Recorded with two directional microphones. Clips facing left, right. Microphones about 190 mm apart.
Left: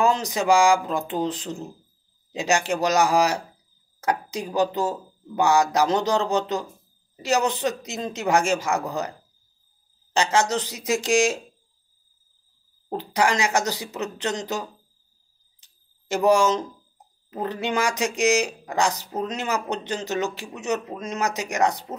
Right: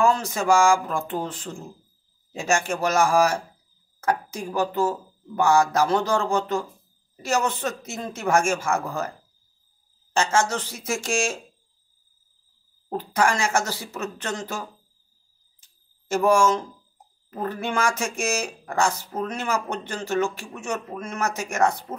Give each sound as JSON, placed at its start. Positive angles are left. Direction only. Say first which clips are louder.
{"t": 0.0, "sound": "speech", "louder": "even", "side_deg": 15}
{"t": 10.1, "sound": "speech", "louder": "left 1 dB", "side_deg": 15}
{"t": 13.0, "sound": "speech", "louder": "even", "side_deg": 15}
{"t": 16.1, "sound": "speech", "louder": "even", "side_deg": 15}